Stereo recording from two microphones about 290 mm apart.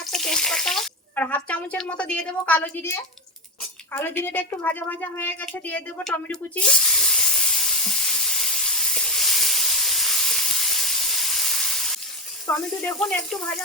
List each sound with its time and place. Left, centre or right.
0.0 s speech: centre
3.6 s a sound: centre
12.5 s speech: centre